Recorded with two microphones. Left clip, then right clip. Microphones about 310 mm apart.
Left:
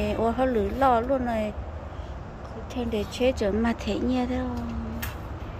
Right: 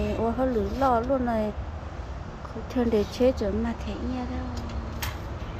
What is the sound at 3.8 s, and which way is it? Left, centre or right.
Speech, left.